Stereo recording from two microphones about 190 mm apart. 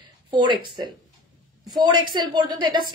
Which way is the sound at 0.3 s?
25° right (ahead or behind).